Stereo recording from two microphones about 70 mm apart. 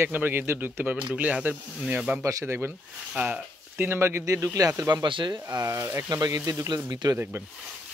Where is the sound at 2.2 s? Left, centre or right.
Right.